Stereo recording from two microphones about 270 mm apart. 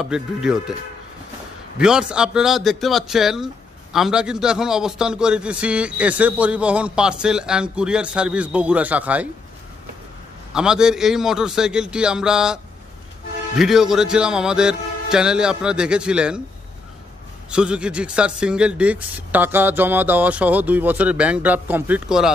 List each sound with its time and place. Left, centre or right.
0.0 s a man's voice: centre
1.8 s a man's voice: centre
10.5 s a man's voice: centre
13.6 s a man's voice: centre
17.5 s a man's voice: centre